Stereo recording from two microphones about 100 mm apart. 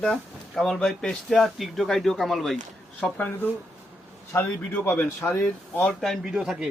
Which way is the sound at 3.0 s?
15° left (ahead or behind).